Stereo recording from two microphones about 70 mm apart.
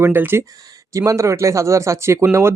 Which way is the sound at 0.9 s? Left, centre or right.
Right.